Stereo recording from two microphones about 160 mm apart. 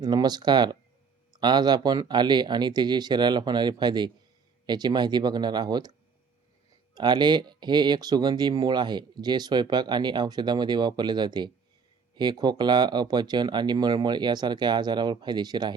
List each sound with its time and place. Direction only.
0.0 s speech: 25° right (ahead or behind)
6.9 s speech: 25° right (ahead or behind)